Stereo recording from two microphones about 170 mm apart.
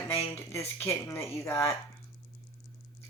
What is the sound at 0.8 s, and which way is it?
Speech, 10° left (ahead or behind).